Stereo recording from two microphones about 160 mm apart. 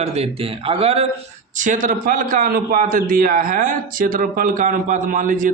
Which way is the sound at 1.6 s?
55° right (ahead or behind).